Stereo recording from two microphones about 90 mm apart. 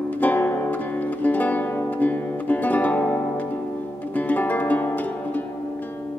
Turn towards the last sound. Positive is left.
turn(degrees=20)  # may be behind; listen again after turning